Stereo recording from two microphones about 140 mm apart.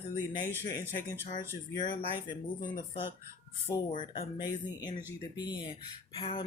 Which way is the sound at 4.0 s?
30° left (ahead or behind).